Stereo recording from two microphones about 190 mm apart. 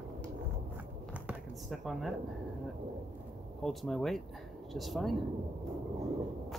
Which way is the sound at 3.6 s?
Centre (ahead or behind).